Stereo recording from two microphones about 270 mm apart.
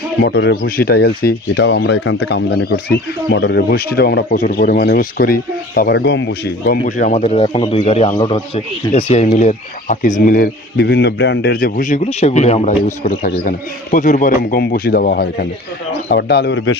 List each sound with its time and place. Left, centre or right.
0.2 s a man's voice: left